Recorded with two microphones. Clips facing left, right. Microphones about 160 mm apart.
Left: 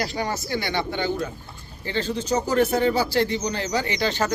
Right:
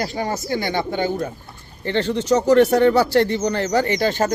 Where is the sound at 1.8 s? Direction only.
65° right (ahead or behind).